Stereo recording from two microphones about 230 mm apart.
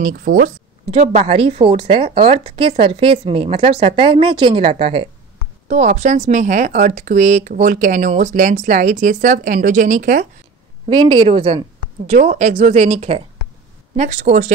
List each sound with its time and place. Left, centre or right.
0.0 s speech: right
0.9 s a woman's voice: right
10.9 s a woman's voice: right